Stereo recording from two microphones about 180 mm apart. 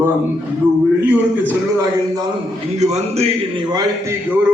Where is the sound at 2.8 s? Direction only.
35° right (ahead or behind).